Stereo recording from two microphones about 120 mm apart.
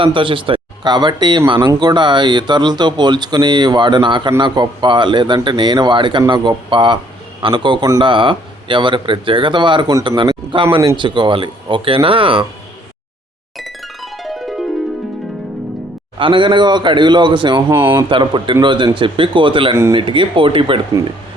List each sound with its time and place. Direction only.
0.0 s speech: 45° right (ahead or behind)
13.6 s music: centre (ahead or behind)
16.1 s speech: 45° right (ahead or behind)
17.7 s speech: 20° right (ahead or behind)
17.9 s speech: 40° right (ahead or behind)